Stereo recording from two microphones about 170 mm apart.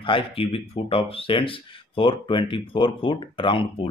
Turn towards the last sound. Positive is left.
turn(degrees=30)  # may be behind; listen again after turning